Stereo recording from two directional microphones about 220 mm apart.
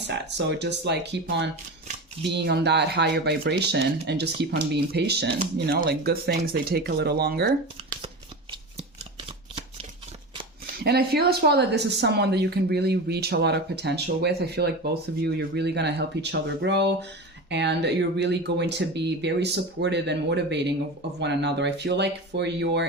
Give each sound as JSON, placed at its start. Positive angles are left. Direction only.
{"t": 0.1, "sound": "speech", "side_deg": -50}
{"t": 10.8, "sound": "speech", "side_deg": -45}